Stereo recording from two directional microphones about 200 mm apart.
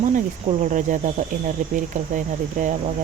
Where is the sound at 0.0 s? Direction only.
40° right (ahead or behind).